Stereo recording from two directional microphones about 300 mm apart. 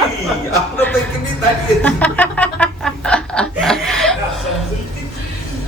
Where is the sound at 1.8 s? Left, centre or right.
Centre.